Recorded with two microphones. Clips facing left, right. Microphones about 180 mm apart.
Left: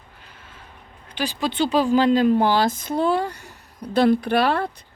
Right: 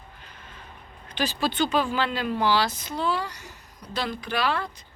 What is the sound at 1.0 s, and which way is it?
Speech, 10° left (ahead or behind).